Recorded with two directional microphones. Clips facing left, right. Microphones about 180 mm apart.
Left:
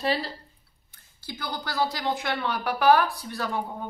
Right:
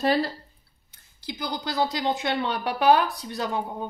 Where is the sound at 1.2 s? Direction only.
15° right (ahead or behind).